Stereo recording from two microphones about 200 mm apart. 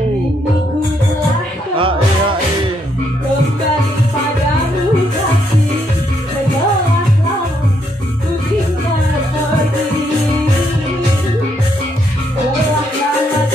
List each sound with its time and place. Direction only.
1.8 s music: 25° right (ahead or behind)